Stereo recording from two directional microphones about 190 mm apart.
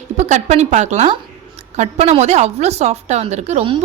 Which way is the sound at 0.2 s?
40° right (ahead or behind).